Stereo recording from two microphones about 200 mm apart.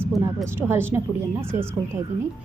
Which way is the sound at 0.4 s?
10° right (ahead or behind).